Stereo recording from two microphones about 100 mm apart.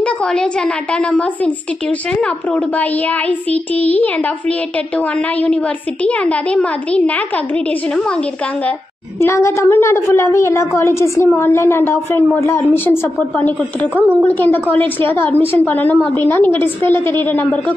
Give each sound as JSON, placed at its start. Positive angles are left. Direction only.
{"t": 0.0, "sound": "a woman's voice", "side_deg": 10}
{"t": 9.2, "sound": "a woman's voice", "side_deg": 30}